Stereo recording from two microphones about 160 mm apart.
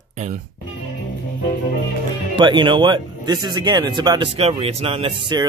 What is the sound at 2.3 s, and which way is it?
Speech, 30° right (ahead or behind).